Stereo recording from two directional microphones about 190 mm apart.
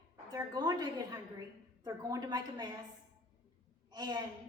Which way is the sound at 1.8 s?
20° right (ahead or behind).